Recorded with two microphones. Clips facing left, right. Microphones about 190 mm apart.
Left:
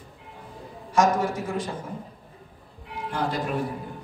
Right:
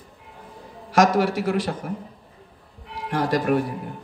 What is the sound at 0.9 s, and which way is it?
A man's voice, 90° right.